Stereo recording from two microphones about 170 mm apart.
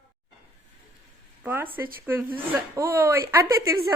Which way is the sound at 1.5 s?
10° right (ahead or behind).